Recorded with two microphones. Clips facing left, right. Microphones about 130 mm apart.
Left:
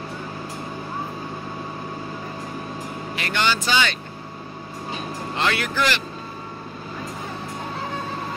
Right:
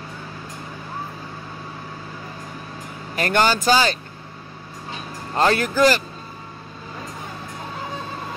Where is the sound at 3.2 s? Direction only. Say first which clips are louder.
Right 5 dB; 45° right (ahead or behind).